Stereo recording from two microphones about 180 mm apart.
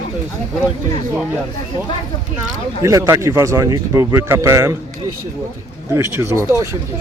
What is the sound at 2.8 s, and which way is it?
A man's voice, 15° right (ahead or behind).